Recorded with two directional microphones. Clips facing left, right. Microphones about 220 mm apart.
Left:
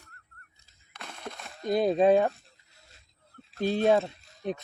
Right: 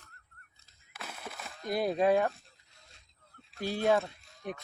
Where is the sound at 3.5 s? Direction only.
20° left (ahead or behind).